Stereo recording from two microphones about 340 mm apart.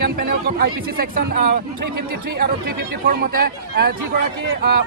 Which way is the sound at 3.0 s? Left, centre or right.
Right.